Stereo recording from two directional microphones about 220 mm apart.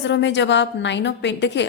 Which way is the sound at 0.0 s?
55° left (ahead or behind).